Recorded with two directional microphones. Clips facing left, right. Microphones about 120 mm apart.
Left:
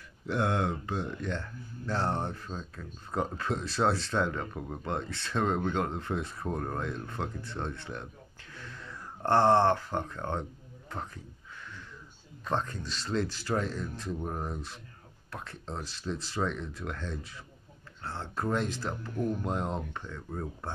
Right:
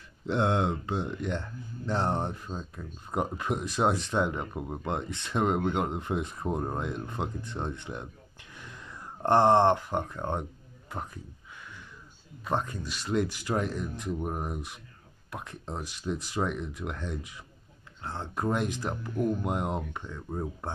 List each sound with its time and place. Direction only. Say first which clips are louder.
0.3 s speech: right 3 dB; 20° right (ahead or behind)
12.4 s speech: right 1 dB; 10° right (ahead or behind)